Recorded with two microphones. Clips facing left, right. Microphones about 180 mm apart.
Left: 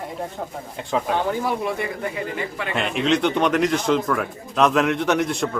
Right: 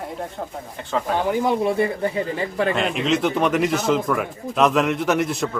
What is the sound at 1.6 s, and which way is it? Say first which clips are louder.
Speech: right 5 dB; 30° right (ahead or behind).